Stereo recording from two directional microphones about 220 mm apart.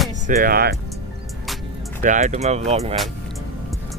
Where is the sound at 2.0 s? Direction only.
35° right (ahead or behind).